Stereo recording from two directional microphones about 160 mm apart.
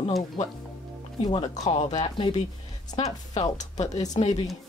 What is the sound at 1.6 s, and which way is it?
Speech, 25° left (ahead or behind).